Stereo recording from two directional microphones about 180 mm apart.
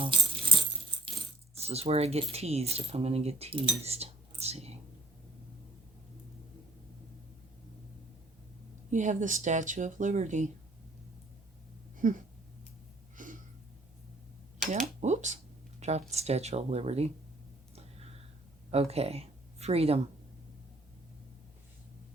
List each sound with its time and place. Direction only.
0.0 s coin: 30° right (ahead or behind)
1.5 s speech: 35° right (ahead or behind)
3.8 s cutlery: 35° right (ahead or behind)
8.9 s speech: 45° right (ahead or behind)
12.0 s speech: 50° right (ahead or behind)
13.2 s a sound: 45° right (ahead or behind)
15.0 s speech: 40° right (ahead or behind)
18.7 s speech: 35° right (ahead or behind)